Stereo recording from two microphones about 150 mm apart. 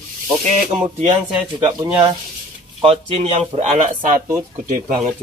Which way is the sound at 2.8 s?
40° right (ahead or behind).